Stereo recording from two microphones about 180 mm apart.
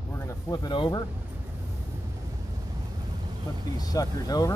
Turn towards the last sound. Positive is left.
turn(degrees=20)  # may be behind; listen again after turning